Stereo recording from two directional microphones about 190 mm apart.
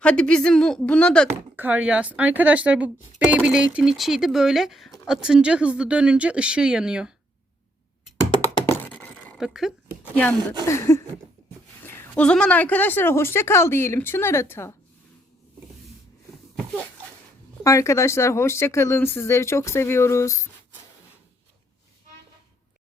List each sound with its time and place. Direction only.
0.0 s speech: 5° left (ahead or behind)
1.5 s speech: 10° right (ahead or behind)
8.8 s a sound: 10° left (ahead or behind)
10.0 s a woman's voice: 10° left (ahead or behind)
17.6 s a woman's voice: 15° left (ahead or behind)